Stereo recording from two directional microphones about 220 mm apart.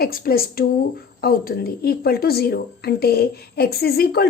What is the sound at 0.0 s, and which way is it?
A woman's voice, 45° left (ahead or behind).